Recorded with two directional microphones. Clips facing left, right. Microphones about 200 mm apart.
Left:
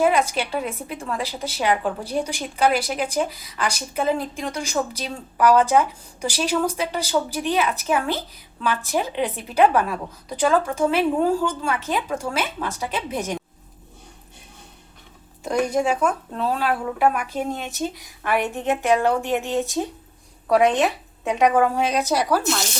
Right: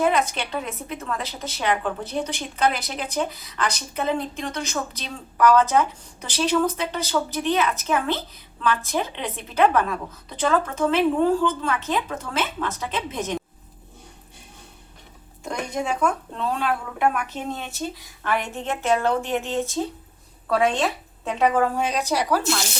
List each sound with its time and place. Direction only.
0.0 s a woman's voice: 10° left (ahead or behind)
15.7 s a woman's voice: 10° left (ahead or behind)
22.0 s speech: 15° right (ahead or behind)